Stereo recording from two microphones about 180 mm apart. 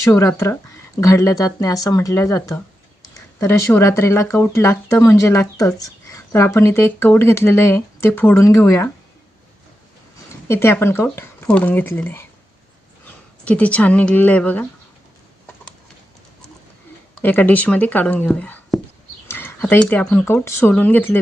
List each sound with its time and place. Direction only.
0.0 s speech: 20° left (ahead or behind)
10.5 s speech: 15° left (ahead or behind)
13.4 s speech: 5° left (ahead or behind)
17.2 s speech: 10° left (ahead or behind)